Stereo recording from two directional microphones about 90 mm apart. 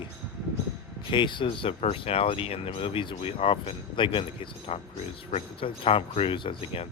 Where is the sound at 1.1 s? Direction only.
65° left (ahead or behind).